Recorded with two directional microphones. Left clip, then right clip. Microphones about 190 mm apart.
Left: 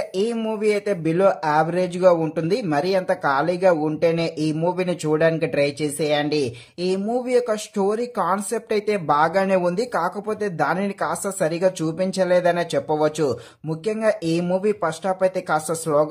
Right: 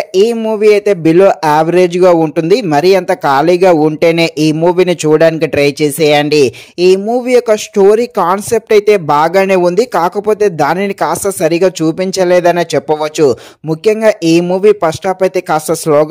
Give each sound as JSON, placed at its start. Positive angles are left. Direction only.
{"t": 0.1, "sound": "speech", "side_deg": -35}